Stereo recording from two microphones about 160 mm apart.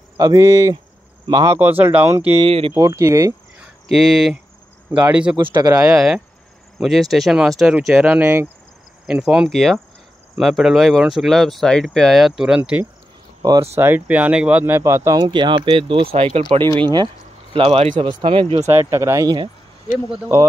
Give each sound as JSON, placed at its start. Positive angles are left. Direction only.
{"t": 0.2, "sound": "speech", "side_deg": -20}
{"t": 1.6, "sound": "speech", "side_deg": -10}
{"t": 2.4, "sound": "speech", "side_deg": -35}
{"t": 2.7, "sound": "speech", "side_deg": -20}
{"t": 3.9, "sound": "speech", "side_deg": 0}
{"t": 5.4, "sound": "speech", "side_deg": -25}
{"t": 5.8, "sound": "speech", "side_deg": -5}
{"t": 13.4, "sound": "speech", "side_deg": -25}
{"t": 13.7, "sound": "speech", "side_deg": -15}
{"t": 18.2, "sound": "speech", "side_deg": -30}
{"t": 18.7, "sound": "speech", "side_deg": -20}